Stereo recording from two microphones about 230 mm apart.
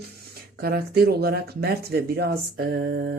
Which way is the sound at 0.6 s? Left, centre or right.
Right.